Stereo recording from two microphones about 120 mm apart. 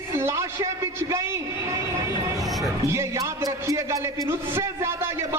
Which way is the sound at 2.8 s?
25° right (ahead or behind).